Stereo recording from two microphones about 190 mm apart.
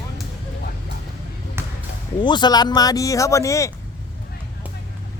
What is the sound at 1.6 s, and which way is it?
Basketball bounce, 10° right (ahead or behind).